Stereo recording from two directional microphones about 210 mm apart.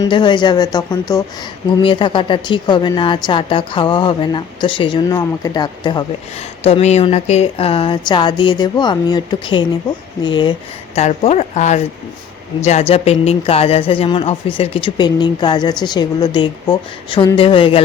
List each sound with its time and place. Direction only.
0.0 s a woman's voice: 20° left (ahead or behind)
10.9 s a woman's voice: 30° left (ahead or behind)